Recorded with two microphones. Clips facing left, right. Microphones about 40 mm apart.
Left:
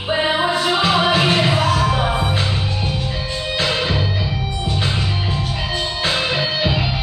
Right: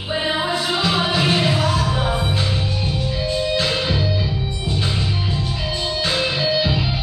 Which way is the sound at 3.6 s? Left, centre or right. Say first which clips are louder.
Left 1 dB; centre.